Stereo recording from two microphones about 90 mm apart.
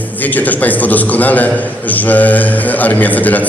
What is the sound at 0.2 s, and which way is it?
A man's voice, 20° left (ahead or behind).